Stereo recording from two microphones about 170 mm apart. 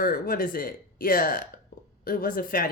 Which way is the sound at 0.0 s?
55° left (ahead or behind).